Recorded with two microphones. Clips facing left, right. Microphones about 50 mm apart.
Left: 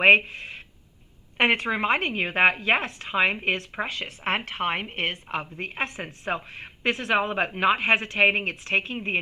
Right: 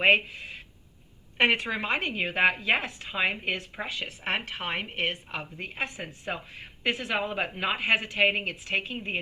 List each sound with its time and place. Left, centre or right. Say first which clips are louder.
0.0 s a woman's voice: left 5 dB; left
2.8 s speech: left 5 dB; left